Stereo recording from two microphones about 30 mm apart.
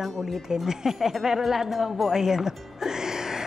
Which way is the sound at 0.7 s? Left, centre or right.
Centre.